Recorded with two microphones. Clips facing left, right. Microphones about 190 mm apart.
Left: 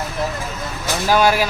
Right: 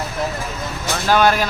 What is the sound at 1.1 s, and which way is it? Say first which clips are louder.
Speech: even; 10° left (ahead or behind).